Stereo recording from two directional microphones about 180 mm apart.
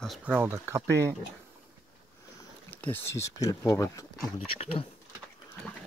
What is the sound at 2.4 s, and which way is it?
Boat, 10° left (ahead or behind).